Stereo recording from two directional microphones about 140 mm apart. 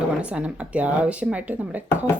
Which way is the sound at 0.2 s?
10° right (ahead or behind).